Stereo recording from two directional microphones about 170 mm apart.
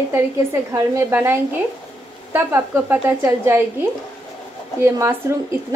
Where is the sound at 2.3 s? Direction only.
10° right (ahead or behind).